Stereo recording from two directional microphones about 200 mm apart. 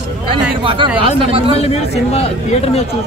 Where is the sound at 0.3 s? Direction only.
25° right (ahead or behind).